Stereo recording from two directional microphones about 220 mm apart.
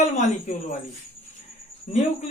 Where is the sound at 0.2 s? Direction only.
35° left (ahead or behind).